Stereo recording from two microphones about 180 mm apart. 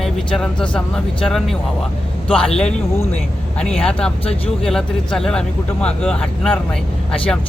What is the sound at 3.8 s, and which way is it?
Speech, 5° left (ahead or behind).